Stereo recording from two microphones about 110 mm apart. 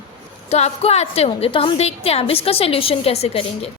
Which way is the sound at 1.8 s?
70° left (ahead or behind).